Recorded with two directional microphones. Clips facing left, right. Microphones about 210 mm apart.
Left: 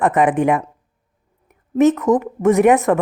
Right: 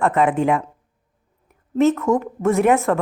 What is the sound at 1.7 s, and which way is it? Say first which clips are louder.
Speech: left 3 dB; 15° left (ahead or behind).